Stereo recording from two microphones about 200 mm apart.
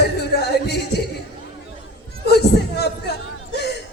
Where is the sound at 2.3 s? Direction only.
55° left (ahead or behind).